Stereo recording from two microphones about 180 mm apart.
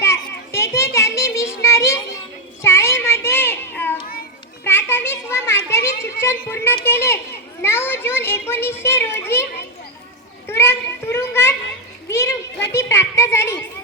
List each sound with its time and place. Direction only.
0.0 s children playing: 15° left (ahead or behind)
2.6 s child singing: 15° left (ahead or behind)
4.6 s children playing: 15° left (ahead or behind)
7.6 s a sound: 15° left (ahead or behind)
10.5 s children playing: 15° left (ahead or behind)
12.7 s a sound: 15° left (ahead or behind)